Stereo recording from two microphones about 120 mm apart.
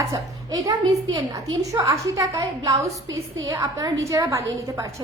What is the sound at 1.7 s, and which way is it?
A woman's voice, 25° right (ahead or behind).